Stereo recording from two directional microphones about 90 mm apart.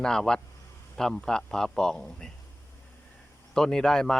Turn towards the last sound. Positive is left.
turn(degrees=5)  # may be behind; listen again after turning